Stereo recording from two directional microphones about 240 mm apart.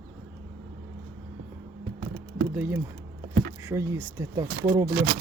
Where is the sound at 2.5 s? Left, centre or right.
Centre; by 4.9 s right.